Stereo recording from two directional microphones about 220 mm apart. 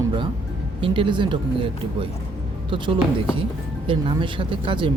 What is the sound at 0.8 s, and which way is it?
Speech, 20° right (ahead or behind).